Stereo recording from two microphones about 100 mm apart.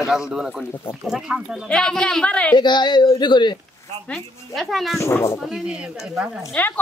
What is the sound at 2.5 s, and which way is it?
Speech, 50° left (ahead or behind).